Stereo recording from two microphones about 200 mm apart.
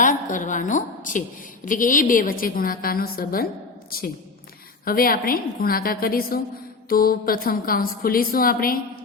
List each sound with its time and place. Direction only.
0.0 s a woman's voice: 40° left (ahead or behind)
4.9 s a woman's voice: 45° left (ahead or behind)